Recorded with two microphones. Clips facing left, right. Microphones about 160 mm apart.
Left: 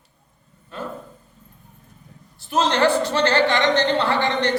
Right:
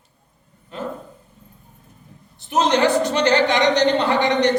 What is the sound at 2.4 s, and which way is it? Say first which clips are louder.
A woman's voice: right 1 dB; 20° right (ahead or behind).